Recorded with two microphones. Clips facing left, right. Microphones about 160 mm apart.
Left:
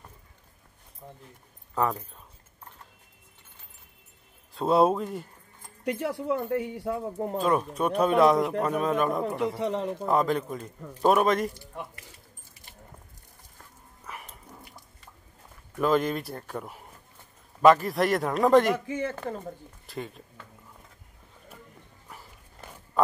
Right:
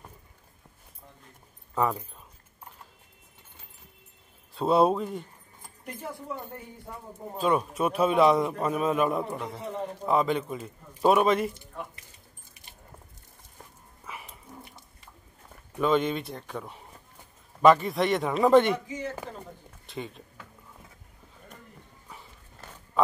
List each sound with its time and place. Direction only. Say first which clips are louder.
1.8 s a man's voice: even; centre (ahead or behind)
4.6 s a man's voice: even; centre (ahead or behind)
5.9 s speech: left 9 dB; 80° left
7.4 s a man's voice: right 1 dB; centre (ahead or behind)
9.6 s a man's voice: left 5 dB; 90° left
10.0 s a man's voice: right 1 dB; centre (ahead or behind)
14.0 s dog: even; centre (ahead or behind)
15.8 s a man's voice: even; centre (ahead or behind)
18.9 s speech: left 4 dB; 60° left (ahead or behind)
19.9 s speech: even; centre (ahead or behind)